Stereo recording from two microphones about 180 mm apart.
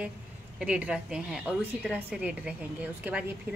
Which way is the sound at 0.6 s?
5° right (ahead or behind).